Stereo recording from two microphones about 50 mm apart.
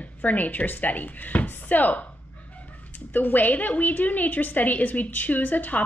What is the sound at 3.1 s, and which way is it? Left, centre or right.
A woman's voice, left.